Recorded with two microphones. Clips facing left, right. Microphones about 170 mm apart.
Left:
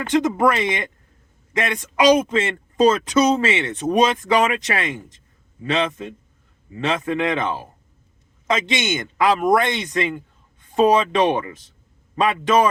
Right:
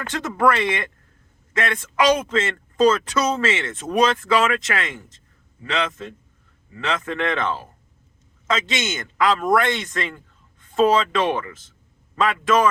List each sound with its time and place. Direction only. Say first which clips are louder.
0.0 s a man's voice: left 3 dB; 15° left (ahead or behind)